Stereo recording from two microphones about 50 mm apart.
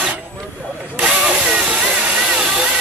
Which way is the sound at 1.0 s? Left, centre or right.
Centre.